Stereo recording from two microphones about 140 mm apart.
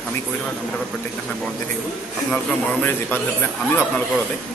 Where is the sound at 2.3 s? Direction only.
10° left (ahead or behind).